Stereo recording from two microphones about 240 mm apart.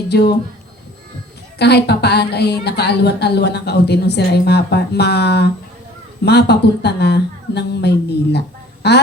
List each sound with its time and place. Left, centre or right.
0.1 s a woman's voice: left
1.5 s a woman's voice: left